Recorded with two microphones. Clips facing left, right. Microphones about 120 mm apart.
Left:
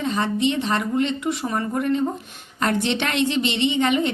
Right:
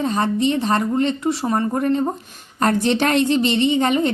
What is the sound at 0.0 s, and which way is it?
A woman's voice, 40° right (ahead or behind).